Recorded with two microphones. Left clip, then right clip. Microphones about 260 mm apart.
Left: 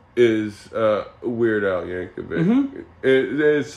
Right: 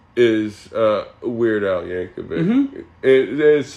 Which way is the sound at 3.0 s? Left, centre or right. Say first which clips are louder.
Right 3 dB; centre.